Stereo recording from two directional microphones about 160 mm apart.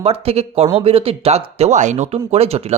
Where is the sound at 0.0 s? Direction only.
40° right (ahead or behind).